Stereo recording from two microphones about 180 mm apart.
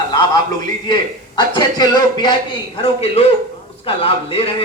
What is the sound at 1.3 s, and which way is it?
Speech, 25° left (ahead or behind).